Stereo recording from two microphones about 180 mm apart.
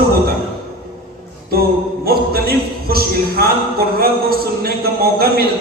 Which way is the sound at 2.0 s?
60° right (ahead or behind).